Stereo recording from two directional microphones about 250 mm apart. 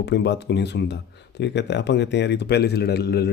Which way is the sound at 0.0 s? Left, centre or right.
Left.